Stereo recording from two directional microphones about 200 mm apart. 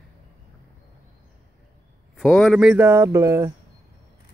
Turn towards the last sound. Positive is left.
turn(degrees=-15)  # may be behind; listen again after turning